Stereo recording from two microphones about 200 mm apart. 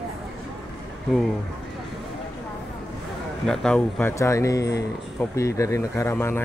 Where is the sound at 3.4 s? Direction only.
5° left (ahead or behind).